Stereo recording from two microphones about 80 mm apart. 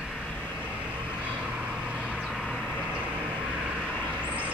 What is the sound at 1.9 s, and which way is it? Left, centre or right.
Vehicle, centre.